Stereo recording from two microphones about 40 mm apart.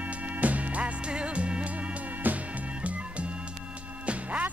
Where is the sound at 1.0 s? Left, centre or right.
Right.